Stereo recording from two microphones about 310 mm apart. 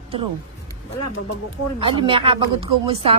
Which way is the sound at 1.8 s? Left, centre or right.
Centre.